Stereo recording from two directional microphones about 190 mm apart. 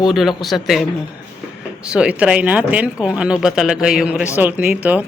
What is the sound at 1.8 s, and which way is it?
Speech, 5° right (ahead or behind).